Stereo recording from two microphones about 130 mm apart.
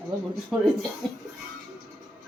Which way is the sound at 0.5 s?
5° right (ahead or behind).